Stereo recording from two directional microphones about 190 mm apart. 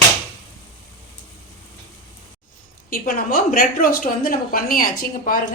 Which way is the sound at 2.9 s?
45° left (ahead or behind).